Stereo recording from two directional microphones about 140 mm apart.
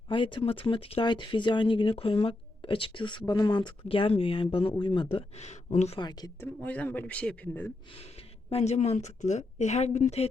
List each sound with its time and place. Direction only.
0.1 s speech: 35° left (ahead or behind)
5.1 s a woman's voice: 50° left (ahead or behind)
6.0 s speech: 30° left (ahead or behind)
6.4 s speech: 10° left (ahead or behind)
8.4 s a woman's voice: 50° left (ahead or behind)